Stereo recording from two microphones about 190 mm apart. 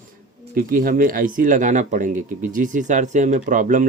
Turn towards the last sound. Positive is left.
turn(degrees=-40)  # may be behind; listen again after turning